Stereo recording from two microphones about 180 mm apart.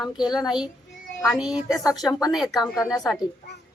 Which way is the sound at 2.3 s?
Centre (ahead or behind).